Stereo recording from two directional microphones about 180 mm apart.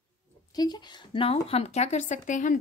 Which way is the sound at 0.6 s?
25° left (ahead or behind).